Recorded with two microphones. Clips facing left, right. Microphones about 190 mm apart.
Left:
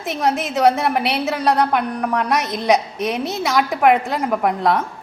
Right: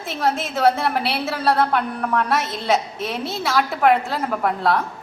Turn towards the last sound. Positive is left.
turn(degrees=15)  # may be behind; listen again after turning